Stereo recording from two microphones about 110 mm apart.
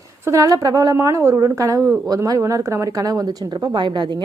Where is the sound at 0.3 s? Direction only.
30° right (ahead or behind).